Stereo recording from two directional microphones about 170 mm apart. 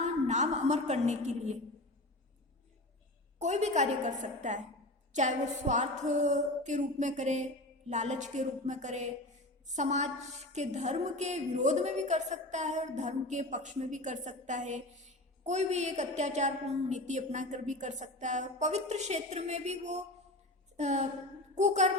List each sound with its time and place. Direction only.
0.0 s a woman's voice: 45° right (ahead or behind)
3.3 s a woman's voice: 45° right (ahead or behind)
21.5 s a sound: 45° right (ahead or behind)